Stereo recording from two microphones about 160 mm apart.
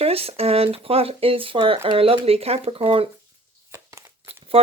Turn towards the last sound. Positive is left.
turn(degrees=-35)  # may be behind; listen again after turning